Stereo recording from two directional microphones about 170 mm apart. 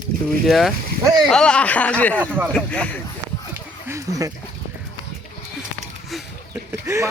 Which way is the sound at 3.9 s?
20° right (ahead or behind).